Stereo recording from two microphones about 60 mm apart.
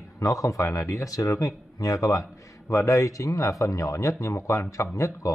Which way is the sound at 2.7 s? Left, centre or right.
Left.